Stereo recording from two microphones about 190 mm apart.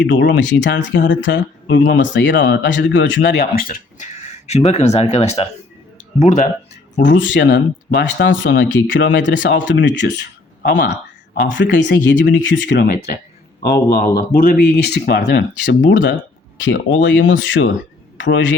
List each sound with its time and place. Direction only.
0.0 s speech: 75° left (ahead or behind); by 6.5 s 40° left (ahead or behind)
7.0 s speech: 75° left (ahead or behind)
8.2 s speech: 80° left; by 10.9 s 60° left (ahead or behind)
11.4 s speech: 70° left (ahead or behind)
13.7 s speech: 50° left (ahead or behind); by 17.7 s 90° left
18.2 s speech: 75° left (ahead or behind)